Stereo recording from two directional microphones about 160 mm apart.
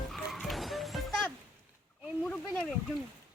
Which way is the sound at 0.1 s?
Centre (ahead or behind).